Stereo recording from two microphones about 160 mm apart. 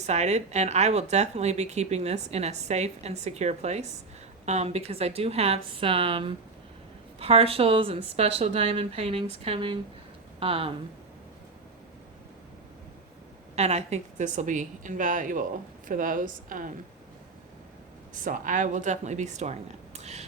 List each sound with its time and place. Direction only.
0.0 s a woman's voice: 45° right (ahead or behind)
13.6 s a woman's voice: 45° right (ahead or behind)
18.1 s a woman's voice: 55° right (ahead or behind)